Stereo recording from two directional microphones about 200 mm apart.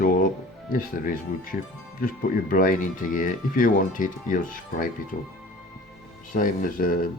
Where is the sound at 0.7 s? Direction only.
45° left (ahead or behind).